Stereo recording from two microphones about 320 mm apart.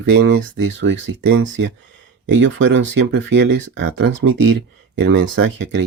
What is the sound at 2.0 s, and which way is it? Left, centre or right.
Speech, right.